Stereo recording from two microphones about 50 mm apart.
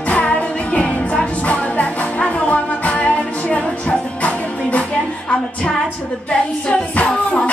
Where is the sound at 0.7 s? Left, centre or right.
Left.